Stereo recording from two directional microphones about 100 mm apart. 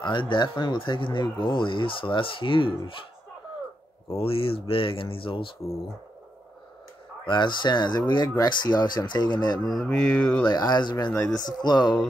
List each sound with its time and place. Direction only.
0.0 s speech: 55° left (ahead or behind)
4.2 s speech: 65° left (ahead or behind)
7.2 s speech: 50° left (ahead or behind)
9.7 s mantra: 5° left (ahead or behind)
10.4 s speech: 40° left (ahead or behind)